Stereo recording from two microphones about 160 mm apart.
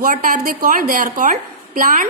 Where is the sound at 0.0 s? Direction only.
55° right (ahead or behind).